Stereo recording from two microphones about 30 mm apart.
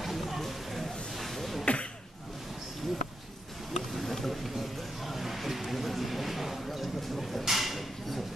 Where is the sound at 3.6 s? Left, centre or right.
Centre.